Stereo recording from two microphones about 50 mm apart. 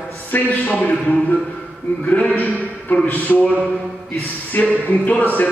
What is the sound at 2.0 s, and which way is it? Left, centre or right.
Speech, left.